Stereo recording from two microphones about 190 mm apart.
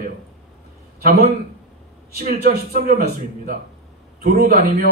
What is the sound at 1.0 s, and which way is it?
A man's voice, 55° right (ahead or behind).